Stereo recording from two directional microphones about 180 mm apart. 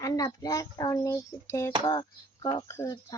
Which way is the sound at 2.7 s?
15° left (ahead or behind).